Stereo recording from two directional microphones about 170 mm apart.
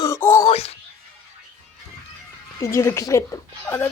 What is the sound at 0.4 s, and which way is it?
Music, 35° left (ahead or behind).